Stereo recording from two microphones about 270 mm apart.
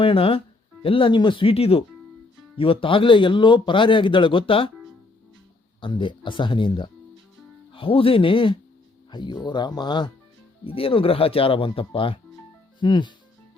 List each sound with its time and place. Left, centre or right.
0.0 s a man's voice: centre
5.8 s a man's voice: centre